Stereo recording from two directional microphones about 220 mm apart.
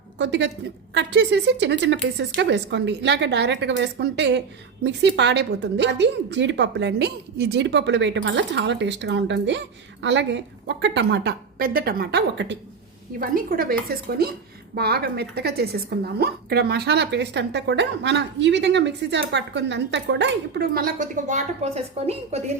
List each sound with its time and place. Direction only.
0.2 s a woman's voice: 50° right (ahead or behind)
13.1 s a woman's voice: 40° right (ahead or behind)